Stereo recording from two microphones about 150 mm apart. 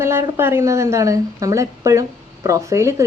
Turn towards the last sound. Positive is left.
turn(degrees=-20)  # may be behind; listen again after turning